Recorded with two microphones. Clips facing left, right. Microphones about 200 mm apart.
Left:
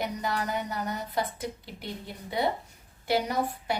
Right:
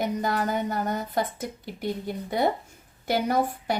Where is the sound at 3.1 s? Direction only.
45° right (ahead or behind).